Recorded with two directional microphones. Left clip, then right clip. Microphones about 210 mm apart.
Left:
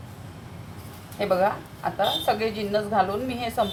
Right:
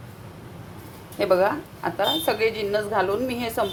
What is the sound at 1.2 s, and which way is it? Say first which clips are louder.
A woman's voice: right 2 dB; 50° right (ahead or behind).